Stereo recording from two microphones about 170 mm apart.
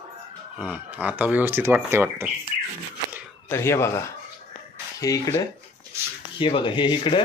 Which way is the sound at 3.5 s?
15° left (ahead or behind).